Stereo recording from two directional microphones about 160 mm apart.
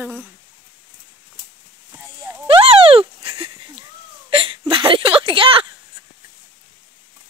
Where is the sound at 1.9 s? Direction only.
10° right (ahead or behind).